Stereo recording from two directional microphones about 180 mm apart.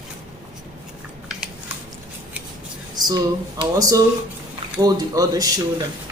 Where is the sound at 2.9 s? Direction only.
20° right (ahead or behind).